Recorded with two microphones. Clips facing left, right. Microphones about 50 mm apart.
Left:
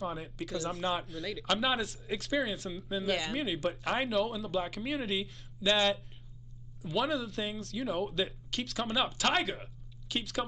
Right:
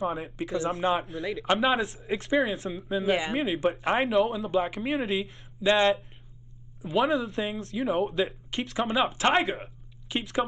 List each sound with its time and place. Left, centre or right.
0.4 s speech: right
3.6 s speech: right
4.0 s speech: centre
5.6 s speech: right
9.6 s a sound: right